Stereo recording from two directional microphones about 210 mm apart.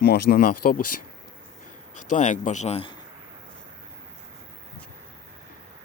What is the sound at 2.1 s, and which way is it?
Speech, 35° left (ahead or behind).